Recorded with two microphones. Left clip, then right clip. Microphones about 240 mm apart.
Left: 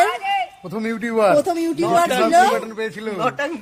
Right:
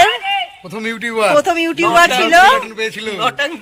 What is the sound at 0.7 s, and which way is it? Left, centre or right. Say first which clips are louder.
Speech: right 3 dB; centre.